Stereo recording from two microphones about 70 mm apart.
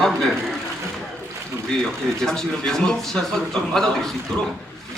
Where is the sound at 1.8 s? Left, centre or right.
Centre.